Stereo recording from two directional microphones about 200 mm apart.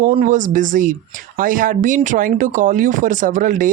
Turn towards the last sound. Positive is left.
turn(degrees=-40)  # may be behind; listen again after turning